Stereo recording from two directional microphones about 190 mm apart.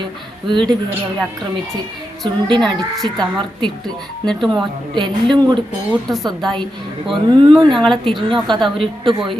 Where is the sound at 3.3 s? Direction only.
25° right (ahead or behind).